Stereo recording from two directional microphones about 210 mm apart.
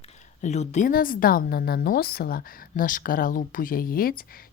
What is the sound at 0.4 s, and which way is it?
A woman's voice, 35° left (ahead or behind).